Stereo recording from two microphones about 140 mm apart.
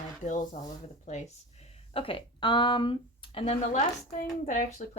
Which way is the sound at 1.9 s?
40° left (ahead or behind).